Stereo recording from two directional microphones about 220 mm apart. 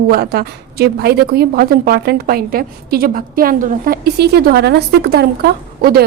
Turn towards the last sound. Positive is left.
turn(degrees=-45)  # may be behind; listen again after turning